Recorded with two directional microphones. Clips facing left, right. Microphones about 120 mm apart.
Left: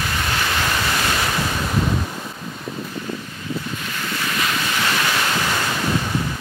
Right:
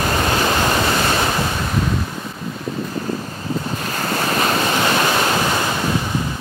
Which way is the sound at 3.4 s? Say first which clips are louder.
Right 4 dB; 40° right (ahead or behind).